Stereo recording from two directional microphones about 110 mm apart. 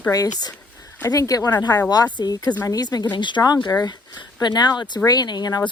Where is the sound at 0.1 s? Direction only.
35° left (ahead or behind).